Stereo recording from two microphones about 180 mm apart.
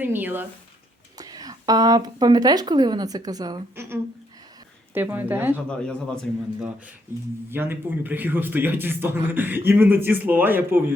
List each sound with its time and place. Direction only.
0.0 s a man's voice: 10° right (ahead or behind)
4.9 s a man's voice: 10° right (ahead or behind)
5.6 s speech: 5° left (ahead or behind)
6.6 s a man's voice: 5° right (ahead or behind)